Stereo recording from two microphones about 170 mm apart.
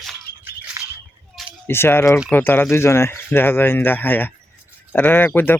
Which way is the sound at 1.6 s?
15° left (ahead or behind).